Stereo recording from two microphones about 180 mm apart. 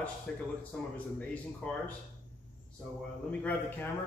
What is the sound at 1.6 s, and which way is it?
Speech, 5° left (ahead or behind).